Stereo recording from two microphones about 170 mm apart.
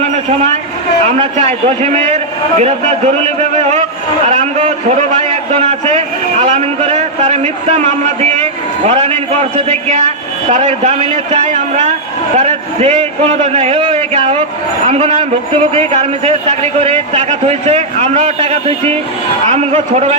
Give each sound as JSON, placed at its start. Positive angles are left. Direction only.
{"t": 1.0, "sound": "a man's voice", "side_deg": -40}